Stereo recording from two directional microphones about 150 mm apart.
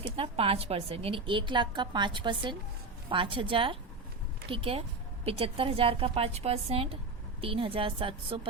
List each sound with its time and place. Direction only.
0.0 s a woman's voice: 40° right (ahead or behind)